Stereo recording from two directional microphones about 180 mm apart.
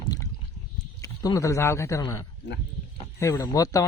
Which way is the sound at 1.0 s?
20° left (ahead or behind).